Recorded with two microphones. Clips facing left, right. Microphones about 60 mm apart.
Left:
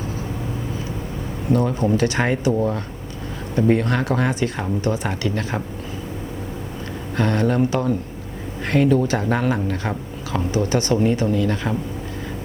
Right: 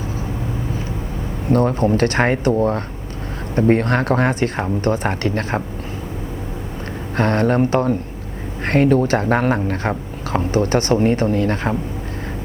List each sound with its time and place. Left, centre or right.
1.5 s speech: right
7.2 s speech: right